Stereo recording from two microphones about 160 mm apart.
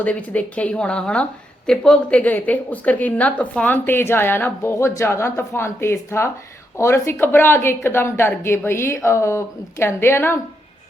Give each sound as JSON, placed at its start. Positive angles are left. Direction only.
{"t": 0.0, "sound": "a woman's voice", "side_deg": 10}